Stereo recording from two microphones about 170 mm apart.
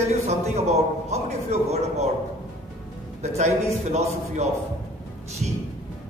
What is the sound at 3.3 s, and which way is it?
A man's voice, 40° right (ahead or behind).